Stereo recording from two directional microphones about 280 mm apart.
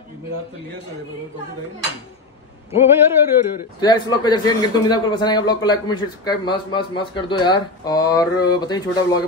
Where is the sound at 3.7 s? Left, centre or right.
Centre.